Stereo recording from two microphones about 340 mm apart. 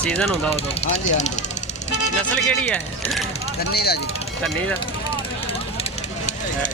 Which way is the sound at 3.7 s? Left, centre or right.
Left.